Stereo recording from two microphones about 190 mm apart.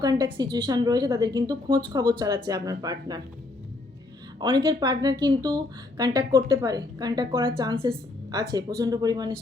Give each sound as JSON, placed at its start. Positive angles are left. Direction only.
{"t": 0.0, "sound": "a woman's voice", "side_deg": -20}
{"t": 4.4, "sound": "a woman's voice", "side_deg": -20}